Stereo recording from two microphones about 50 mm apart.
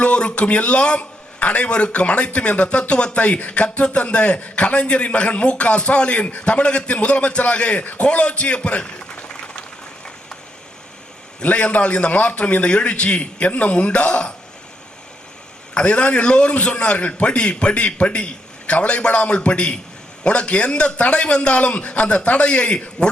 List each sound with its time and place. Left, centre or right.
0.0 s a man's voice: left
11.4 s a man's voice: left
15.7 s a man's voice: left